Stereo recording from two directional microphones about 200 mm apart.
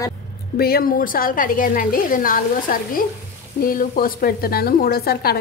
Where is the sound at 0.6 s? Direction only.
50° left (ahead or behind).